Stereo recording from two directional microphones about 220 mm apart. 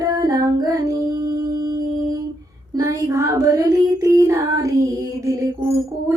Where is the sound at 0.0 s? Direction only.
15° right (ahead or behind).